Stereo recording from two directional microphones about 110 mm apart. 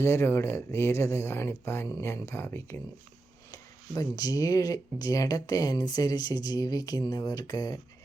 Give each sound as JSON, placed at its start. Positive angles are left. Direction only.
{"t": 0.0, "sound": "speech", "side_deg": 25}
{"t": 3.5, "sound": "speech", "side_deg": 35}